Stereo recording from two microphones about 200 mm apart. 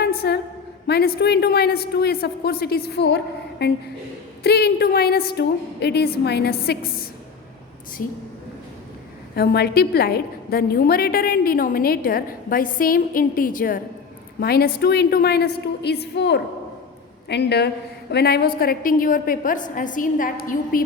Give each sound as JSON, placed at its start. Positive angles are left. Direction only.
{"t": 0.0, "sound": "a sound", "side_deg": 55}
{"t": 0.9, "sound": "a woman's voice", "side_deg": 50}
{"t": 4.4, "sound": "a woman's voice", "side_deg": 55}
{"t": 9.3, "sound": "a woman's voice", "side_deg": 55}